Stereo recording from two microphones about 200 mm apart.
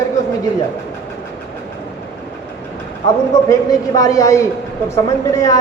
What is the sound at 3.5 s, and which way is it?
A man's voice, 20° left (ahead or behind).